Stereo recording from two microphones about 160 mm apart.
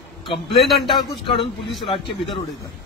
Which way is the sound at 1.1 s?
35° left (ahead or behind).